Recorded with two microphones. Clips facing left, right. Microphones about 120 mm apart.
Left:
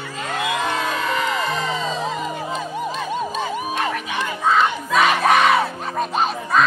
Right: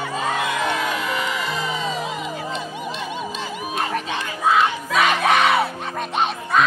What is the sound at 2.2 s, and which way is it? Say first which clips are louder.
Music: left 2 dB; 40° left (ahead or behind).